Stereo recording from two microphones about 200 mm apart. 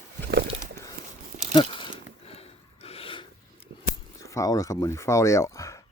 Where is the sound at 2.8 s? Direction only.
30° left (ahead or behind).